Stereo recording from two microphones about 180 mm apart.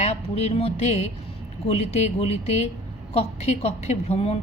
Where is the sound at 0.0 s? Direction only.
35° left (ahead or behind).